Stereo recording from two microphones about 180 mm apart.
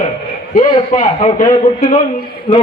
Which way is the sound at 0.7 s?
25° left (ahead or behind).